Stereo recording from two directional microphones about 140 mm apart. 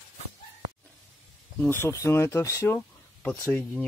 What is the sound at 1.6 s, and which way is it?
Speech, 15° left (ahead or behind).